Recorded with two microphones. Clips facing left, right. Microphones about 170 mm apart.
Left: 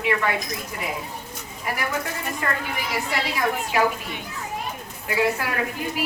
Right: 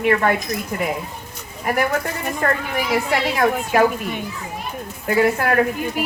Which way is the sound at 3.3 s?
50° right (ahead or behind).